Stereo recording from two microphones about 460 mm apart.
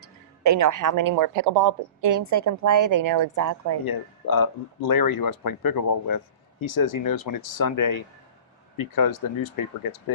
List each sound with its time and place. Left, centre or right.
0.0 s speech: right
3.8 s speech: left